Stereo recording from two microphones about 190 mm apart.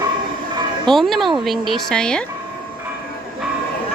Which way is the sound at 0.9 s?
Centre (ahead or behind).